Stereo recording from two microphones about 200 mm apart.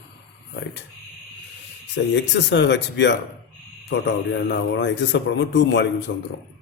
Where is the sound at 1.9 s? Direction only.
60° left (ahead or behind).